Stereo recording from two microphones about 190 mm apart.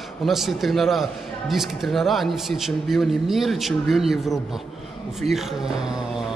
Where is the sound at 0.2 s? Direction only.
Centre (ahead or behind).